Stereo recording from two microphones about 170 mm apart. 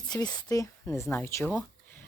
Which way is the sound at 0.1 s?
25° left (ahead or behind).